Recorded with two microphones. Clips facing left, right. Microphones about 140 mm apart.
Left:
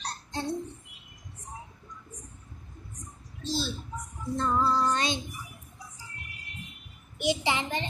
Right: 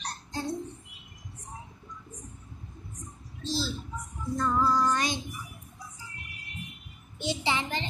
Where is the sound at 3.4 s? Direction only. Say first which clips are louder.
Even; 20° left (ahead or behind).